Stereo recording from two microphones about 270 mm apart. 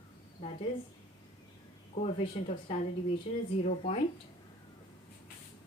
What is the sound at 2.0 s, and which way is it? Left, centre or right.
Speech, left.